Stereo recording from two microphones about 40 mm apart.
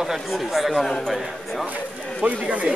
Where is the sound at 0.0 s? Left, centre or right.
Centre.